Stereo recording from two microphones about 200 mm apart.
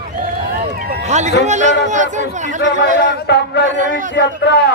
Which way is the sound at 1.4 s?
35° right (ahead or behind).